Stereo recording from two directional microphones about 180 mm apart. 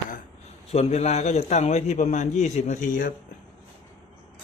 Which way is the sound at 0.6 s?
35° left (ahead or behind).